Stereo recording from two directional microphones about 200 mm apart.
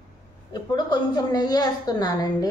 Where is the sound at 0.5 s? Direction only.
20° left (ahead or behind).